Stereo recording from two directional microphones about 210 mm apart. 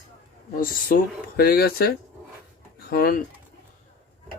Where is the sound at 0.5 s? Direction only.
40° left (ahead or behind).